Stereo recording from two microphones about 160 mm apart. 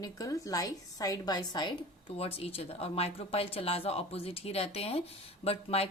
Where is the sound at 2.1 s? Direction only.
40° left (ahead or behind).